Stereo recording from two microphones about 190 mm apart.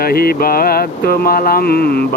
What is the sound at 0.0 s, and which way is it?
Speech, 55° left (ahead or behind).